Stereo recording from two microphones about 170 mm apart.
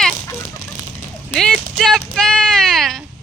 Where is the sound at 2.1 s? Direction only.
5° left (ahead or behind).